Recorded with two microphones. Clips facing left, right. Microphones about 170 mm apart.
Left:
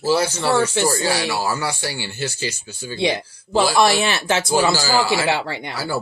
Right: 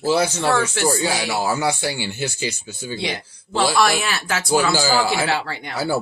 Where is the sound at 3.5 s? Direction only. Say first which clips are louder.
Left 2 dB; 15° left (ahead or behind).